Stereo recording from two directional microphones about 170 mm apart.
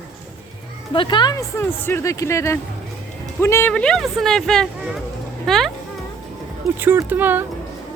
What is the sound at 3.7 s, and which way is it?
Speech, 5° left (ahead or behind).